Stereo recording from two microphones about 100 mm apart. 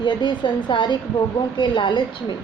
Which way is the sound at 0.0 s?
50° left (ahead or behind).